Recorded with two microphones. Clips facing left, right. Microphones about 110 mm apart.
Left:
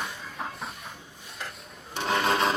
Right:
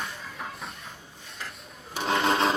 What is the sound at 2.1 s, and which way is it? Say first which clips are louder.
Sewing machine: right 1 dB; 25° right (ahead or behind).